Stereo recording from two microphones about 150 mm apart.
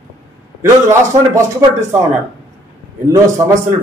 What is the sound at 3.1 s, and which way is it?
Speech, 20° right (ahead or behind).